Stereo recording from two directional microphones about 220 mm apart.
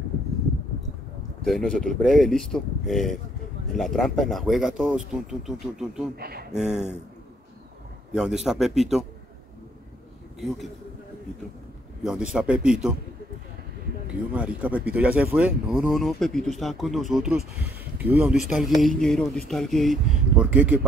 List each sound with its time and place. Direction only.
1.4 s speech: centre (ahead or behind)
6.1 s speech: 45° right (ahead or behind)
6.5 s speech: 5° right (ahead or behind)
8.1 s speech: centre (ahead or behind)
12.0 s speech: 5° right (ahead or behind)
14.3 s speech: 5° right (ahead or behind)